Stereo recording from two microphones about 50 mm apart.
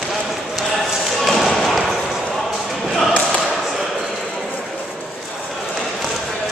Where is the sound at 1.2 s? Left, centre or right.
Centre.